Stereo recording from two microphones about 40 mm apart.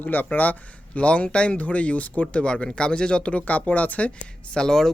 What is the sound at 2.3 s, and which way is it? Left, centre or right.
Speech, left.